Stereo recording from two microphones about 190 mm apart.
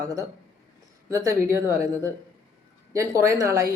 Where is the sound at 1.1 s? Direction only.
15° right (ahead or behind).